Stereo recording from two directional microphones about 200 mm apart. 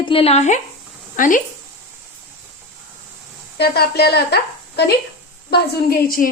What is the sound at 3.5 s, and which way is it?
A woman's voice, 50° left (ahead or behind).